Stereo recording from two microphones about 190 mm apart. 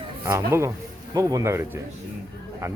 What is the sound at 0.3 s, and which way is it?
Speech, 15° right (ahead or behind).